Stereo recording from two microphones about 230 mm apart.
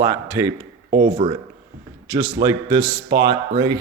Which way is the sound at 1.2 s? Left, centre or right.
Right.